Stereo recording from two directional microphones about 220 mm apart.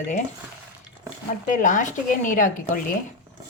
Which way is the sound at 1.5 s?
35° left (ahead or behind).